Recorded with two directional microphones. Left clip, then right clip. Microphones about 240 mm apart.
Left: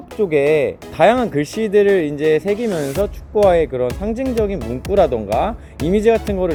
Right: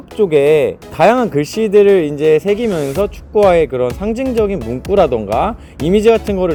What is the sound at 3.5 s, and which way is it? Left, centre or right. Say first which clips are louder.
Speech: right 2 dB; centre.